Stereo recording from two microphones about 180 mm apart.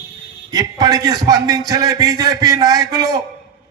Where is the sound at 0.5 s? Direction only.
20° right (ahead or behind).